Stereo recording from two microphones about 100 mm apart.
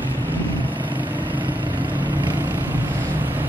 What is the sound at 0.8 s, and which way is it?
Vehicle, 15° right (ahead or behind).